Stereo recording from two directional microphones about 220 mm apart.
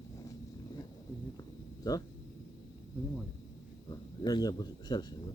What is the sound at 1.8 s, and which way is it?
Speech, 15° left (ahead or behind).